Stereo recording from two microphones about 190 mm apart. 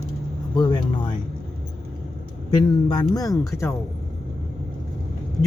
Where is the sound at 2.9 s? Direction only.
20° left (ahead or behind).